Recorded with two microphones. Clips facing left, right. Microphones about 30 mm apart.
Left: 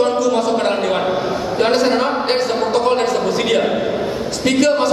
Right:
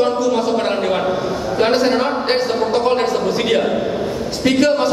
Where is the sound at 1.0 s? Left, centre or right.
Left.